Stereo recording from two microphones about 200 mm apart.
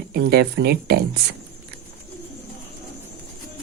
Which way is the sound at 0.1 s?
55° right (ahead or behind).